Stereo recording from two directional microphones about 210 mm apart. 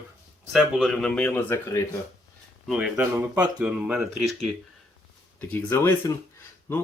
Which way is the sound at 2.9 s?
15° right (ahead or behind).